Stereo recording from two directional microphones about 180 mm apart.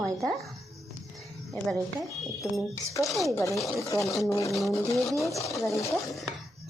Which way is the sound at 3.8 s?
15° left (ahead or behind).